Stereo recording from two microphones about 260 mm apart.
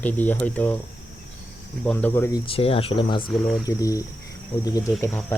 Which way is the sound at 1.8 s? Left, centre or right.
Centre.